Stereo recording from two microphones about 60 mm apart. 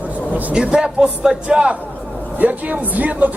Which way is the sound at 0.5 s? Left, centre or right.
Centre.